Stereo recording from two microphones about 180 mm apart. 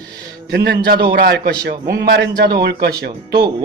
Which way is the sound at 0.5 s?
65° right (ahead or behind).